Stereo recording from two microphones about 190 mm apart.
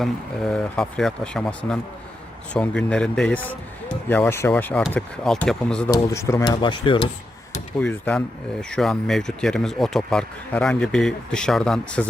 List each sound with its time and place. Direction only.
0.0 s speech: centre (ahead or behind)
5.9 s speech: 15° left (ahead or behind)
7.8 s speech: 5° left (ahead or behind)